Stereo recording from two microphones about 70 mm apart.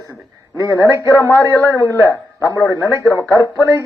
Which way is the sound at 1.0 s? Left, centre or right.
Left.